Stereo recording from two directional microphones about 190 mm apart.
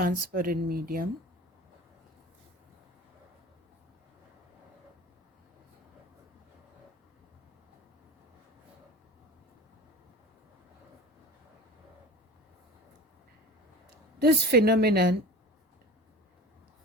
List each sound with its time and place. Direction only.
0.0 s speech: 50° right (ahead or behind)
14.2 s a woman's voice: 55° right (ahead or behind)